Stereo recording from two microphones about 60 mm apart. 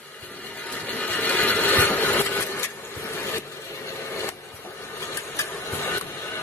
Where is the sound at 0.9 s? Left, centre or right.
Left.